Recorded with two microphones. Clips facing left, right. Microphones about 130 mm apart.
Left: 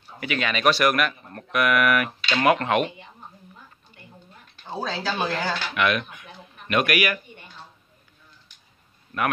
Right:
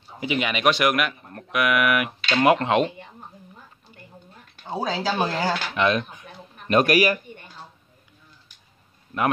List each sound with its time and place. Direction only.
0.2 s speech: 20° right (ahead or behind)
2.4 s speech: 20° right (ahead or behind)
4.6 s speech: 15° right (ahead or behind)
5.8 s speech: 30° right (ahead or behind)
9.1 s speech: 15° right (ahead or behind)